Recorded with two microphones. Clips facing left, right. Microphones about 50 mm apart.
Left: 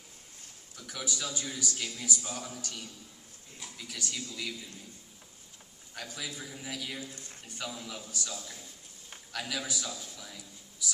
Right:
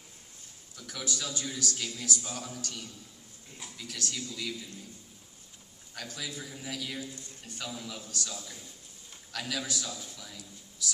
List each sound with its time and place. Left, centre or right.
0.8 s a man's voice: centre
5.9 s a man's voice: centre
7.1 s speech: left
7.4 s a man's voice: centre
9.3 s a man's voice: centre